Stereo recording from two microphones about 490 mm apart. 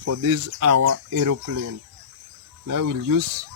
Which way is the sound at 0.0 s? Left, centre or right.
Right.